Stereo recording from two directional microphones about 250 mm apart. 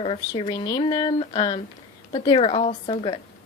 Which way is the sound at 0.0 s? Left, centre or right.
Centre.